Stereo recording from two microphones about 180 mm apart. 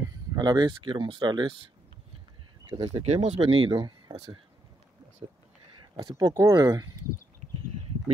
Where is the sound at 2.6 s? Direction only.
35° right (ahead or behind).